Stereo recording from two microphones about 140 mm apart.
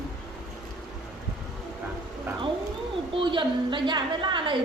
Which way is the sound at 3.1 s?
35° right (ahead or behind).